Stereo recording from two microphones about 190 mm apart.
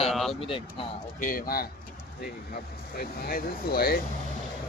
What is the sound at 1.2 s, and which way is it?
Speech, 45° left (ahead or behind).